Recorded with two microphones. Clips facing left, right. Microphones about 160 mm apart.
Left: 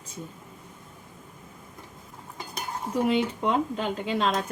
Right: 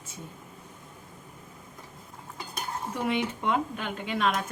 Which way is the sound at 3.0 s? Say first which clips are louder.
Left 3 dB; 30° left (ahead or behind).